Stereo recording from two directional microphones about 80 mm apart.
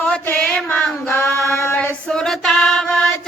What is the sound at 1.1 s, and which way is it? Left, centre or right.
Singing, left.